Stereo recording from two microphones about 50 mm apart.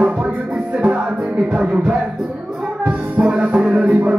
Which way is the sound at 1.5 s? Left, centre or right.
Right.